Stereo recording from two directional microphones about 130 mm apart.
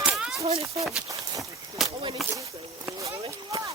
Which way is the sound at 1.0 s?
25° right (ahead or behind).